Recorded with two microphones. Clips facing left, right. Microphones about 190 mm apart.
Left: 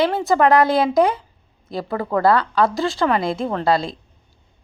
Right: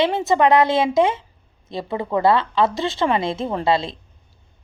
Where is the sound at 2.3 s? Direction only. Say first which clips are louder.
Left 1 dB; 25° right (ahead or behind).